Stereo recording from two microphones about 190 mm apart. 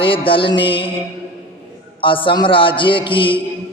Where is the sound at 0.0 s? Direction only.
25° left (ahead or behind).